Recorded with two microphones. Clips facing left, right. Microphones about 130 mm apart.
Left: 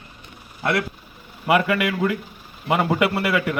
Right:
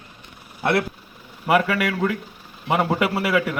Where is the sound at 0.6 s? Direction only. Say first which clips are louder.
Right 2 dB; 30° right (ahead or behind).